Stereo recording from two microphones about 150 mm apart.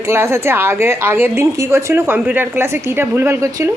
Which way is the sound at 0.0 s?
15° right (ahead or behind).